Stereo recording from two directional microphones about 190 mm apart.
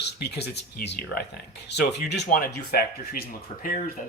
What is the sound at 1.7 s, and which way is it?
Speech, 65° left (ahead or behind).